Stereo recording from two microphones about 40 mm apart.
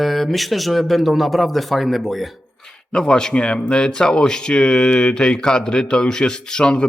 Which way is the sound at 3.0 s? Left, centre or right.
Centre.